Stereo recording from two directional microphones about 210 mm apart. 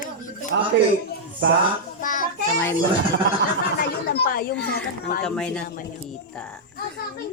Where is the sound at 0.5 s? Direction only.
60° right (ahead or behind).